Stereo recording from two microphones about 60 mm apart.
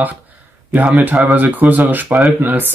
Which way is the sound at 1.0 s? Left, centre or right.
Right.